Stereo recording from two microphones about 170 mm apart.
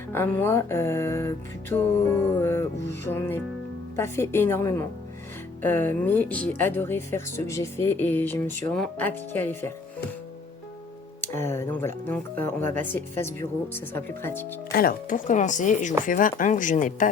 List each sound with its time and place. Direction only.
0.1 s speech: 10° left (ahead or behind)
11.2 s speech: 15° left (ahead or behind)
14.7 s speech: 60° left (ahead or behind)